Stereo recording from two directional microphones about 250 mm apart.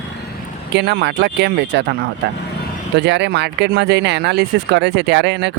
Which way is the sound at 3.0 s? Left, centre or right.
Right.